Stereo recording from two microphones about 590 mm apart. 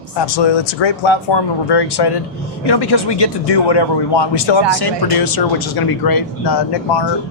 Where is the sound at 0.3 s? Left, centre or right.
Left.